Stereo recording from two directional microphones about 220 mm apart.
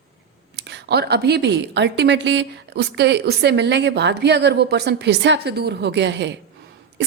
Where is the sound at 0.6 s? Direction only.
50° right (ahead or behind).